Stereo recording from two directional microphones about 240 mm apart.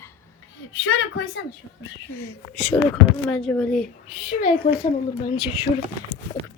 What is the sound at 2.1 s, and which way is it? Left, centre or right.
A woman's voice, centre.